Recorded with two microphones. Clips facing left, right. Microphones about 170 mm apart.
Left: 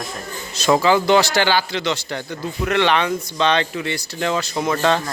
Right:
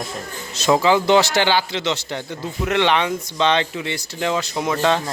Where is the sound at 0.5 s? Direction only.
20° right (ahead or behind).